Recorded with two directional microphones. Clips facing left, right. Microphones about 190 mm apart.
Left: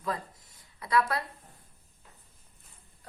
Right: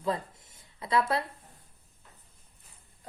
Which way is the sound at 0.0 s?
25° right (ahead or behind).